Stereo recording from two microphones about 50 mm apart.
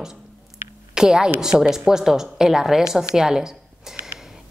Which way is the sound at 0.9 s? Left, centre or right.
Centre.